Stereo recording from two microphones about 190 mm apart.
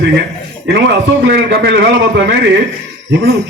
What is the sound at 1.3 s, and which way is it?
Speech, 55° right (ahead or behind).